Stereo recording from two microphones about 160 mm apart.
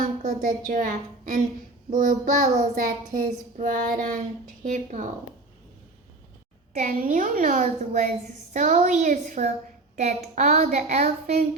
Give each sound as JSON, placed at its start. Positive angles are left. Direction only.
{"t": 0.2, "sound": "a woman's voice", "side_deg": -60}
{"t": 6.7, "sound": "a woman's voice", "side_deg": -55}